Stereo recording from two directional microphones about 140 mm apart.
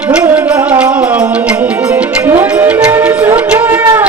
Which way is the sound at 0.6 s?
10° right (ahead or behind).